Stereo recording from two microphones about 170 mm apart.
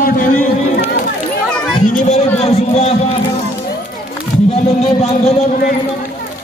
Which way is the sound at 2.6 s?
40° left (ahead or behind).